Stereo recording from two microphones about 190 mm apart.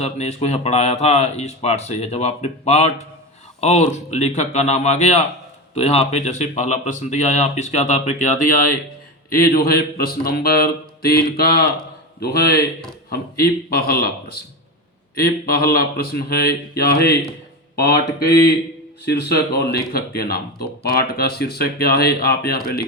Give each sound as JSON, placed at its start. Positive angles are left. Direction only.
{"t": 0.0, "sound": "speech", "side_deg": 35}
{"t": 9.3, "sound": "mantra", "side_deg": 50}
{"t": 12.2, "sound": "speech", "side_deg": 55}
{"t": 13.1, "sound": "mantra", "side_deg": 55}
{"t": 17.7, "sound": "speech", "side_deg": 55}